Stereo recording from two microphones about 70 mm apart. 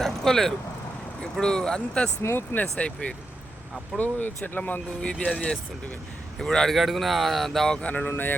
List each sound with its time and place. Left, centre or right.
0.0 s speech: centre
2.2 s speech: left
2.7 s speech: centre
3.9 s speech: left
5.0 s speech: centre
7.8 s speech: left